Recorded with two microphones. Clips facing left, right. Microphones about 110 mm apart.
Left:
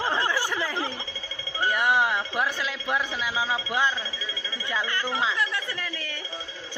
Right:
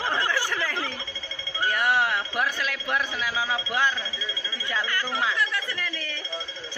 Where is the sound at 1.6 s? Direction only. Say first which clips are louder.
Left 1 dB; 20° left (ahead or behind).